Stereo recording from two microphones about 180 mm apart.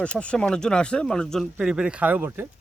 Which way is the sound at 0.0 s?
5° left (ahead or behind).